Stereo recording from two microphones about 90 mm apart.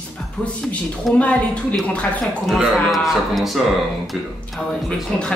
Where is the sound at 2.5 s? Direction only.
Centre (ahead or behind).